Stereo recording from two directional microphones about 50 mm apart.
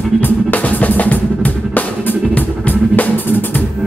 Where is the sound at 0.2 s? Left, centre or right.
Left.